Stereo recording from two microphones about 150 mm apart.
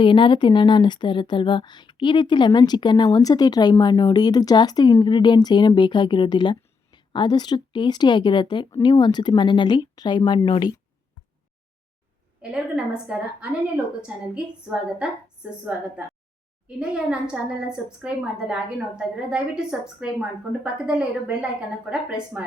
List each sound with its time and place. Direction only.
0.0 s a woman's voice: 35° left (ahead or behind)
12.4 s a woman's voice: 5° right (ahead or behind)